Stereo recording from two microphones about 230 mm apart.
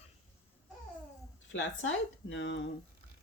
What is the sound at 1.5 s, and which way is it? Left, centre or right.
Speech, left.